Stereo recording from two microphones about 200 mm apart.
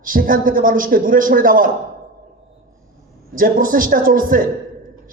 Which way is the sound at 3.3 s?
45° right (ahead or behind).